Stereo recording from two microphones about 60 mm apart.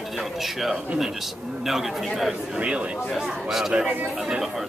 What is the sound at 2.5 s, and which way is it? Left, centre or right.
Speech, centre.